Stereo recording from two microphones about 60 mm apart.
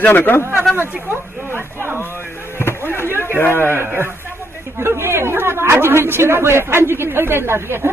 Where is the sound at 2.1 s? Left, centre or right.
Left.